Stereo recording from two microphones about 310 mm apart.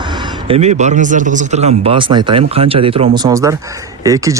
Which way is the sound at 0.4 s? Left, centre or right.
Centre.